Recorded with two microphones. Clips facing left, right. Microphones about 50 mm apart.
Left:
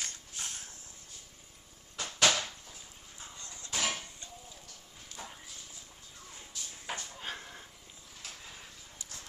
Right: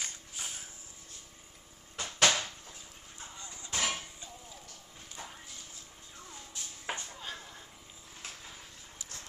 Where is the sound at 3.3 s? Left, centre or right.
Centre.